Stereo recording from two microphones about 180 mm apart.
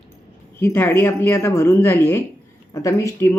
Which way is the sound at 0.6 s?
10° left (ahead or behind).